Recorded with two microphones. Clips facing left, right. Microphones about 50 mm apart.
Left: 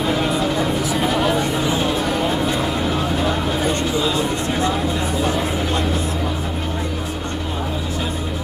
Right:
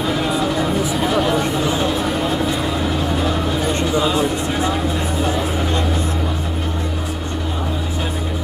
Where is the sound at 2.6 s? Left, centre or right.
Centre.